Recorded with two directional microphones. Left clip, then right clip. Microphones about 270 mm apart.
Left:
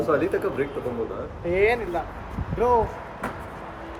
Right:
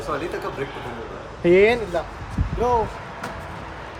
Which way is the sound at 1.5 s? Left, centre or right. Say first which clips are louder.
Right 6 dB; right.